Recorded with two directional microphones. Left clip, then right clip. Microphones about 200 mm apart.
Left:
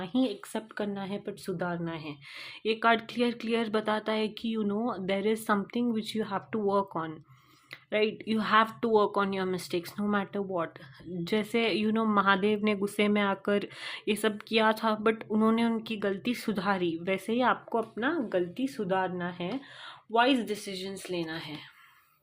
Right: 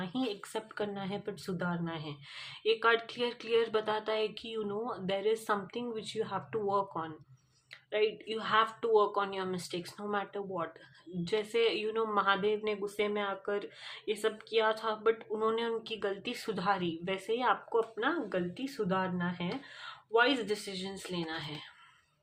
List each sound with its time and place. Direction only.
0.0 s speech: 30° left (ahead or behind)